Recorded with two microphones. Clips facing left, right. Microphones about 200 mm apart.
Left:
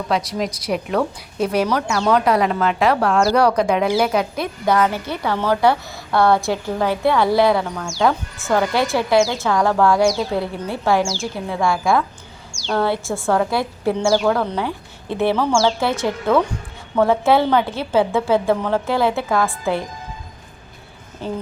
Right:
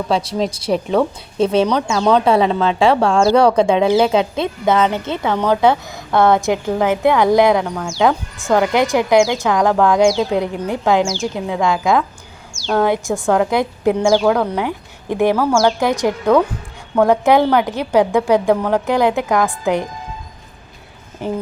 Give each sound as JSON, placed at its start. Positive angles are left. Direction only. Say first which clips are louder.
{"t": 0.1, "sound": "a woman's voice", "louder": "right 2 dB", "side_deg": -30}
{"t": 12.5, "sound": "a woman's voice", "louder": "right 4 dB", "side_deg": -5}
{"t": 21.2, "sound": "a woman's voice", "louder": "right 4 dB", "side_deg": -15}